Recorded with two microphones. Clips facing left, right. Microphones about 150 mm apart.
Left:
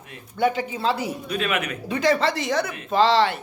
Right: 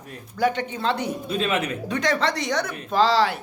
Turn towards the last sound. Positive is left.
turn(degrees=0)  # may be behind; listen again after turning